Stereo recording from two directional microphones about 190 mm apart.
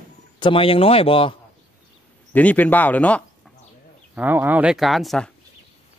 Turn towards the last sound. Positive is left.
turn(degrees=0)  # may be behind; listen again after turning